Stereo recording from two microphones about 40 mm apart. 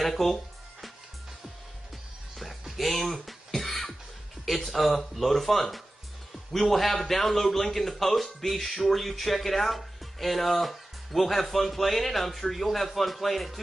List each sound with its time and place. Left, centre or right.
0.0 s music: centre
2.3 s a sound: centre
4.9 s a man's voice: centre